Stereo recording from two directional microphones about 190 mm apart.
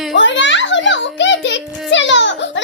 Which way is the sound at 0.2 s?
75° left (ahead or behind).